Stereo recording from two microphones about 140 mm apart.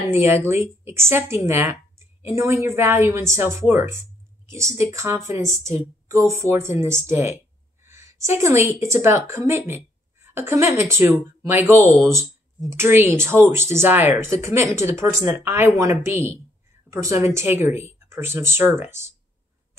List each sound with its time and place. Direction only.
0.1 s a woman's voice: 20° right (ahead or behind)